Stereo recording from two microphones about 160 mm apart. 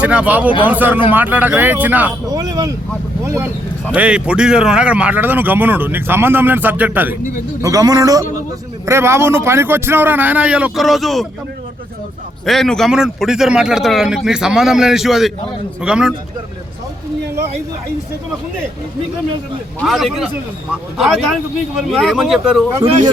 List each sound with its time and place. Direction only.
0.0 s speech: 10° right (ahead or behind)
2.3 s a man's voice: 25° right (ahead or behind)
7.6 s a man's voice: 20° right (ahead or behind); by 11.3 s centre (ahead or behind)
12.5 s a man's voice: 5° left (ahead or behind)
19.8 s a man's voice: centre (ahead or behind)